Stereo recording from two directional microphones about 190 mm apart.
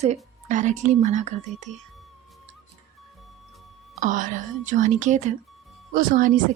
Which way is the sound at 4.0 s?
45° right (ahead or behind).